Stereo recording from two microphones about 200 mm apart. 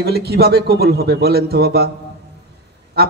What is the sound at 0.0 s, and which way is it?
A man's voice, 55° right (ahead or behind).